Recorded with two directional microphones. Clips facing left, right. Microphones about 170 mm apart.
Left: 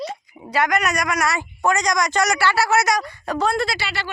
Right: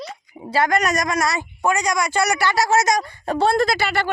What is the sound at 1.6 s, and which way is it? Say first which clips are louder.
A man's voice: even; 10° right (ahead or behind).